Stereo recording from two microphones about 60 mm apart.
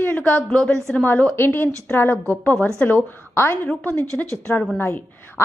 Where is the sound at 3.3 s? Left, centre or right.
Left.